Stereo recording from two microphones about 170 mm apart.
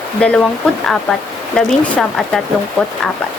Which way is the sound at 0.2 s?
5° left (ahead or behind).